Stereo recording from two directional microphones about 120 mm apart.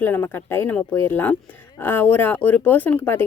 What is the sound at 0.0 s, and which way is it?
Speech, 15° left (ahead or behind).